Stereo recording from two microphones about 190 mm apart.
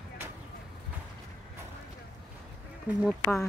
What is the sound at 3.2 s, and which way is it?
Speech, 15° left (ahead or behind).